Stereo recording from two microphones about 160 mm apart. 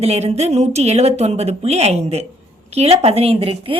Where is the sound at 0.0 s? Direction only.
40° right (ahead or behind).